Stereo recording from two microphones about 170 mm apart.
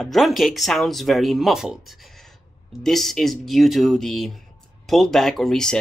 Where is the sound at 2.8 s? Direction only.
Centre (ahead or behind).